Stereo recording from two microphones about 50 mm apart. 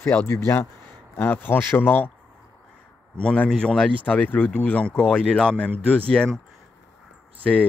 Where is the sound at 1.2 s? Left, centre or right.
Left.